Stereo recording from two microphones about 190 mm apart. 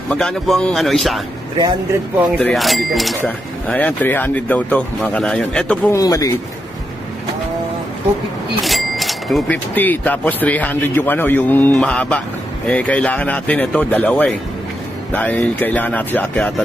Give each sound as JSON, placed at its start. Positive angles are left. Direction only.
{"t": 0.1, "sound": "a man's voice", "side_deg": 5}
{"t": 2.3, "sound": "a man's voice", "side_deg": 0}
{"t": 5.9, "sound": "speech", "side_deg": 20}
{"t": 8.6, "sound": "speech", "side_deg": 0}